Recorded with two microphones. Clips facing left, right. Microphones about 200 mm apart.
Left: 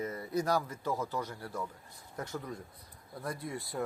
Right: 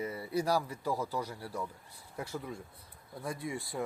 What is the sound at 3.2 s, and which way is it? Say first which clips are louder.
Speech: right 1 dB; centre (ahead or behind).